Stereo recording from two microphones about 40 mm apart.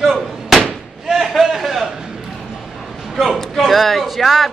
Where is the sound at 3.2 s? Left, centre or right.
Centre.